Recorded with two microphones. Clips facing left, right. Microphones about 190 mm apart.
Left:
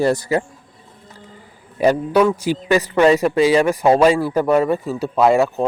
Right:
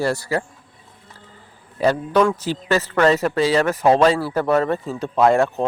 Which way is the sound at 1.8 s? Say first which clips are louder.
Left 2 dB; 10° left (ahead or behind).